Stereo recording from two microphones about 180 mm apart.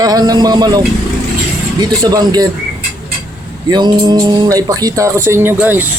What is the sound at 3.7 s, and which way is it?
Speech, 25° right (ahead or behind).